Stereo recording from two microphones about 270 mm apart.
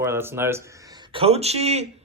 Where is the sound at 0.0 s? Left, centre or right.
Centre.